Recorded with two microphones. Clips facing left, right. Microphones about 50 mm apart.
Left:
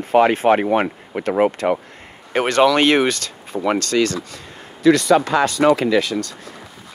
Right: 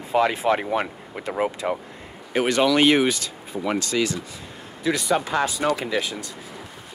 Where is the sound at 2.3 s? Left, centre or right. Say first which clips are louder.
Left 5 dB; left.